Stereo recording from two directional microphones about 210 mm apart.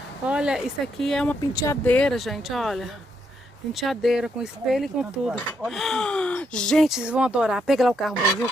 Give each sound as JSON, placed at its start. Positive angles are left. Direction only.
{"t": 0.2, "sound": "speech", "side_deg": -5}
{"t": 1.5, "sound": "speech", "side_deg": 20}
{"t": 1.9, "sound": "speech", "side_deg": 5}